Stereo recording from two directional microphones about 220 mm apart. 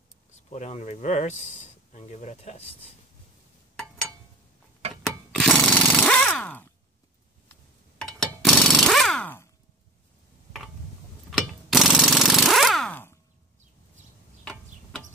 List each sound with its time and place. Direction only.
0.5 s speech: 30° left (ahead or behind)
5.0 s jackhammer: centre (ahead or behind)
8.0 s a sound: centre (ahead or behind)
11.3 s jackhammer: centre (ahead or behind)